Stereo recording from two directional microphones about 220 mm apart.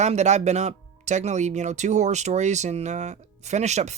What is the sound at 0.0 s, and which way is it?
Speech, 30° right (ahead or behind).